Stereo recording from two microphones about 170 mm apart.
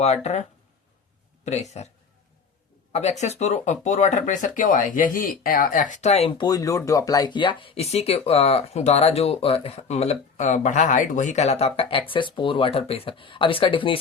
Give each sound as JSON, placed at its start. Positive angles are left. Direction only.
{"t": 0.0, "sound": "speech", "side_deg": 40}
{"t": 1.7, "sound": "speech", "side_deg": 40}
{"t": 2.9, "sound": "speech", "side_deg": 40}